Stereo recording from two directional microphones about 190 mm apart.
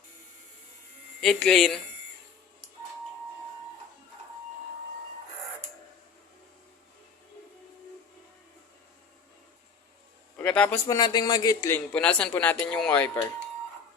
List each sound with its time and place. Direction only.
1.2 s speech: centre (ahead or behind)
10.3 s a sound: 5° left (ahead or behind)
10.8 s speech: 20° left (ahead or behind)
11.9 s speech: 5° left (ahead or behind)